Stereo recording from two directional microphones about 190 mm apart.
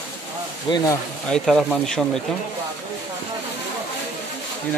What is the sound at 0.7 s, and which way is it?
Speech, 25° left (ahead or behind).